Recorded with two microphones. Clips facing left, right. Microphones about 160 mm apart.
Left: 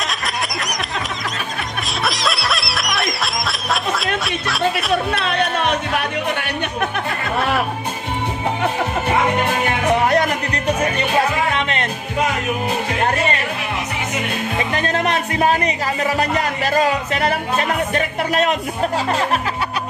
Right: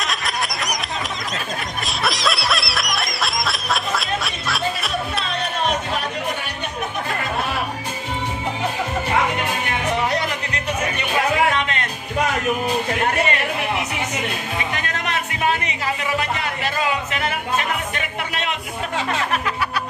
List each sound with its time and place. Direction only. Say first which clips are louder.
0.0 s a sound: left 1 dB; centre (ahead or behind)
2.0 s snicker: even; centre (ahead or behind)
5.2 s music: left 4 dB; 65° left (ahead or behind)
14.7 s music: left 6 dB; 35° left (ahead or behind)